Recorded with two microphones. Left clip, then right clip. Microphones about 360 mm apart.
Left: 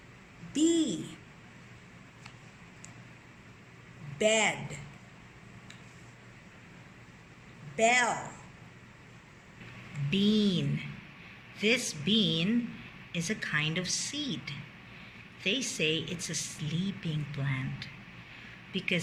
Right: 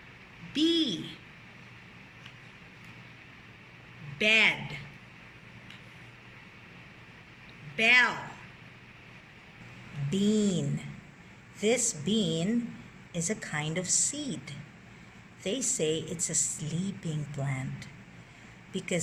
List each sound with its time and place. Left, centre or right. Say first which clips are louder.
0.5 s speech: right 1 dB; centre
4.2 s speech: right 3 dB; centre
7.8 s speech: right 3 dB; centre
10.1 s a woman's voice: even; centre